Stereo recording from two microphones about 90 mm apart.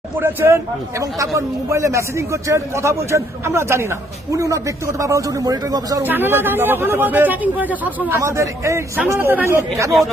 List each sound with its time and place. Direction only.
0.2 s a man's voice: 25° right (ahead or behind); by 6.0 s 45° right (ahead or behind)
6.0 s speech: 20° right (ahead or behind)
8.2 s a man's voice: 35° right (ahead or behind)